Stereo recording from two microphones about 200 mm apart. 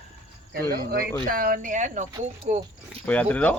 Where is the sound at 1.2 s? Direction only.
45° right (ahead or behind).